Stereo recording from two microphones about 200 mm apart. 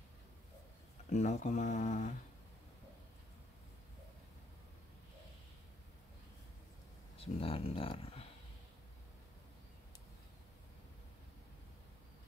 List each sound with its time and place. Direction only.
1.1 s speech: 35° left (ahead or behind)
7.3 s speech: 30° left (ahead or behind)